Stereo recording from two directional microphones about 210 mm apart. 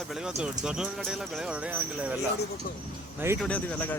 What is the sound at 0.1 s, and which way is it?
Speech, 5° right (ahead or behind).